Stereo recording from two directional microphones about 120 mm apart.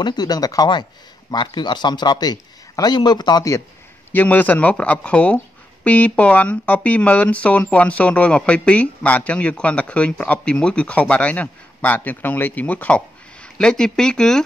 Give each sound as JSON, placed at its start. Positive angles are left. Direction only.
{"t": 0.0, "sound": "a man's voice", "side_deg": 35}
{"t": 4.1, "sound": "speech", "side_deg": 15}